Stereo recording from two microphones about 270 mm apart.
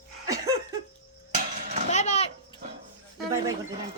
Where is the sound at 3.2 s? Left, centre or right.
Centre.